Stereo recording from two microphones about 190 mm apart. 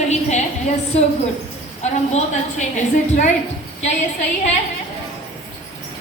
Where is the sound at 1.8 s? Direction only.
35° left (ahead or behind).